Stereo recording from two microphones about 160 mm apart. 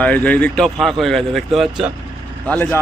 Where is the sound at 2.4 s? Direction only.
10° left (ahead or behind).